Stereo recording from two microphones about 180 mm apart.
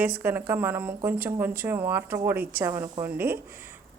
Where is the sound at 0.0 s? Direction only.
10° right (ahead or behind).